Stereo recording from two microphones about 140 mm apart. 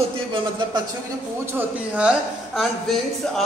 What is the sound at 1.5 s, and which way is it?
Speech, 5° right (ahead or behind).